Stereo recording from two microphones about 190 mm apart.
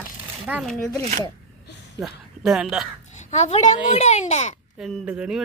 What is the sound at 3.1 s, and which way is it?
A child's voice, 35° left (ahead or behind).